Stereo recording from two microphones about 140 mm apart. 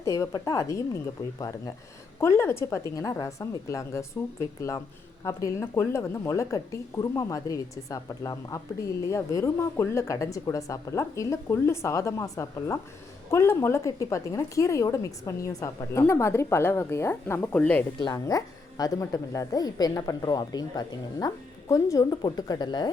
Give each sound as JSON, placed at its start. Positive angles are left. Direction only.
{"t": 0.0, "sound": "speech", "side_deg": 20}
{"t": 18.0, "sound": "speech", "side_deg": 25}